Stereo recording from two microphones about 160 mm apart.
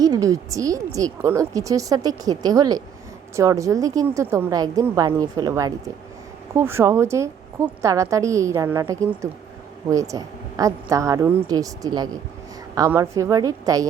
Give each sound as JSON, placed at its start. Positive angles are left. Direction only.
{"t": 0.0, "sound": "a woman's voice", "side_deg": -20}